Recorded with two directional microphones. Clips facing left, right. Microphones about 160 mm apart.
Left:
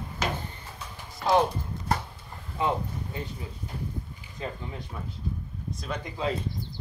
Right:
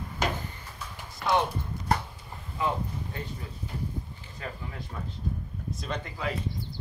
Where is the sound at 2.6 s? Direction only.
30° left (ahead or behind).